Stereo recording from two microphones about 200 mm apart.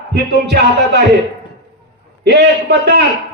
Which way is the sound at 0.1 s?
55° right (ahead or behind).